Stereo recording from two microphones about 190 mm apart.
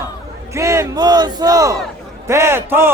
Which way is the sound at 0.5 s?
15° right (ahead or behind).